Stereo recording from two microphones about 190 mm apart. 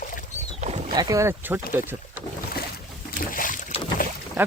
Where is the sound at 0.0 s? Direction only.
45° left (ahead or behind).